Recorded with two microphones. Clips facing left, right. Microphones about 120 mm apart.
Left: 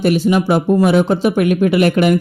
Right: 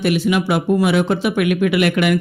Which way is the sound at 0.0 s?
35° left (ahead or behind).